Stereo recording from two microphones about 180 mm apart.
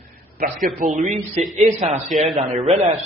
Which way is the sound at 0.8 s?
45° right (ahead or behind).